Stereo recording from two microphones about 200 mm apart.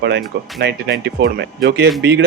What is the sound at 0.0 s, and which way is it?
A man's voice, 55° right (ahead or behind).